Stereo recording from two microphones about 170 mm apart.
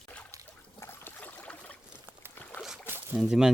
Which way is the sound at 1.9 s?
10° right (ahead or behind).